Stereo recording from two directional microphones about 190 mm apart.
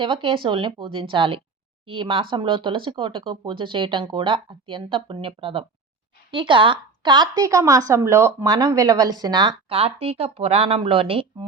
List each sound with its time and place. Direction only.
0.0 s speech: 25° right (ahead or behind)